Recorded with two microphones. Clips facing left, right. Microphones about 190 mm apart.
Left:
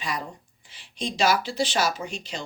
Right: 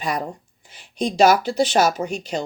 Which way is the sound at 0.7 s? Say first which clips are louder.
Right 8 dB; 45° right (ahead or behind).